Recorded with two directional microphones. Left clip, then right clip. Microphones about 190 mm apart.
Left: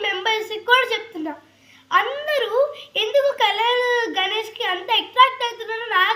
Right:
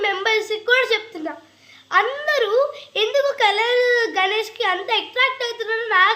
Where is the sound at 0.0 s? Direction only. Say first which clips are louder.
Right 2 dB; 15° right (ahead or behind).